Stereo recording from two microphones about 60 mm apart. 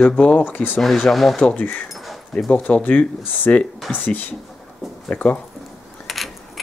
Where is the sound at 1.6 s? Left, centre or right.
Left.